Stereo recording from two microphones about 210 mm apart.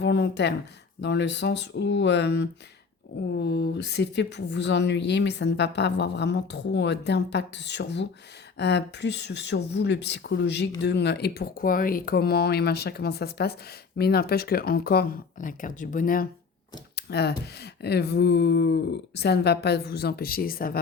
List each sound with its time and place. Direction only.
0.0 s a woman's voice: 55° left (ahead or behind)
16.9 s speech: 50° left (ahead or behind)